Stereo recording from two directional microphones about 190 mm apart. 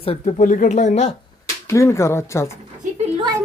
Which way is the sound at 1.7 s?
15° left (ahead or behind).